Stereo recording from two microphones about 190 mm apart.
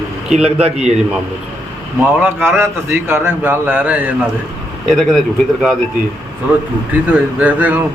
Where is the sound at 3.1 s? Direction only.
10° right (ahead or behind).